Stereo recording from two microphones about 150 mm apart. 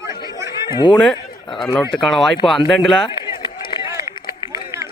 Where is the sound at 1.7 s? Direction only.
10° left (ahead or behind).